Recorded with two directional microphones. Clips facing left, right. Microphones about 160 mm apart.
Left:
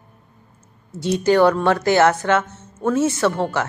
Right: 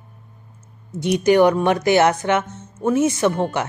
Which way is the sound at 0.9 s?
15° right (ahead or behind).